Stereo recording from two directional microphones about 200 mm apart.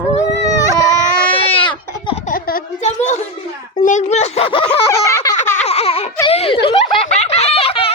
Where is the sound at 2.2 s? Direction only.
45° left (ahead or behind).